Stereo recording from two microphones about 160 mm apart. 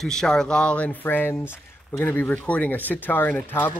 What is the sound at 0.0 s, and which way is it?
Speech, 5° left (ahead or behind).